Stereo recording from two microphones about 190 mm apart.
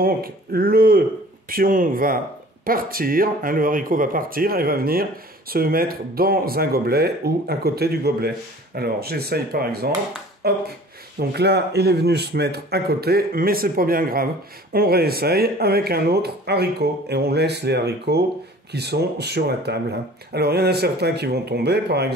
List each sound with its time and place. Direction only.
0.0 s speech: 50° right (ahead or behind)